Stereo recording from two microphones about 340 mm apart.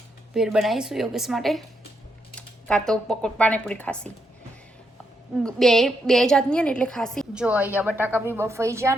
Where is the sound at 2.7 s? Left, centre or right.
Centre.